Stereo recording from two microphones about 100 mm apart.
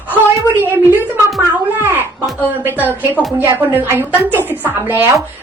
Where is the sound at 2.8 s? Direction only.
20° right (ahead or behind).